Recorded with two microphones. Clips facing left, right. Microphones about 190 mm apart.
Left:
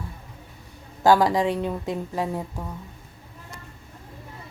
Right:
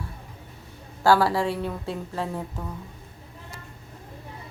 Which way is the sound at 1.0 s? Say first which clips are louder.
Left 2 dB; 15° left (ahead or behind).